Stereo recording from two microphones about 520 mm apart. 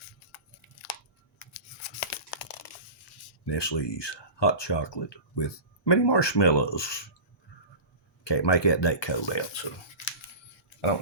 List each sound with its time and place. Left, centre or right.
0.3 s a sound: left
1.4 s tearing: left
3.4 s speech: left
8.2 s speech: left